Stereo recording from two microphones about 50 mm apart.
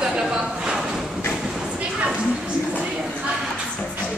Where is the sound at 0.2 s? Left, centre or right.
Centre.